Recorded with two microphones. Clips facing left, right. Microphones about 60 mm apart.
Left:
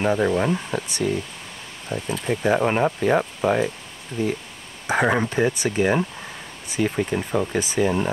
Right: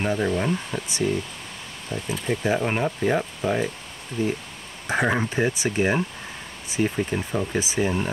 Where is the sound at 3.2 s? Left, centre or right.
Left.